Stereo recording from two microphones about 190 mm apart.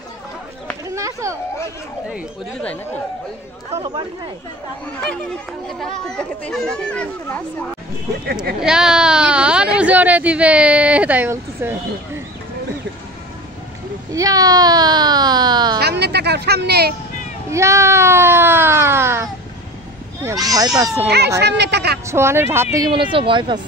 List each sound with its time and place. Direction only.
0.8 s a sound: 15° right (ahead or behind)
2.6 s speech: 5° left (ahead or behind)
5.7 s speech: 5° left (ahead or behind)
8.5 s speech: 5° right (ahead or behind)
14.1 s speech: 20° right (ahead or behind)
15.8 s a sound: 60° right (ahead or behind)
17.5 s speech: 15° right (ahead or behind)
20.4 s speech: 20° right (ahead or behind)
21.4 s speech: 60° right (ahead or behind)
22.0 s speech: 15° right (ahead or behind)